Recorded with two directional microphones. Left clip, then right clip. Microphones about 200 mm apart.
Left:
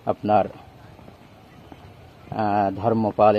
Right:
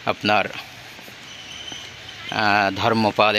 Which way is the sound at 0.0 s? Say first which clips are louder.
Even; 25° right (ahead or behind).